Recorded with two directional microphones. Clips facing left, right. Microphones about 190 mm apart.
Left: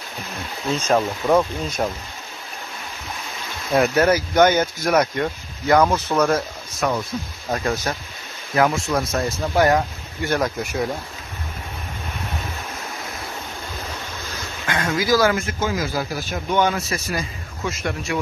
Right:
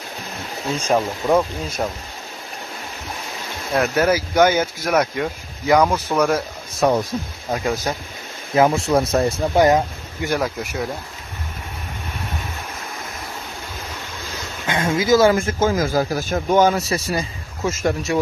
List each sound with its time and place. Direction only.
0.8 s speech: 5° right (ahead or behind)
3.7 s speech: centre (ahead or behind)
6.8 s speech: 35° right (ahead or behind)
7.5 s speech: 10° right (ahead or behind)
8.5 s speech: 30° right (ahead or behind)
10.4 s speech: 5° right (ahead or behind)
14.7 s speech: 25° right (ahead or behind)
15.3 s speech: 45° right (ahead or behind)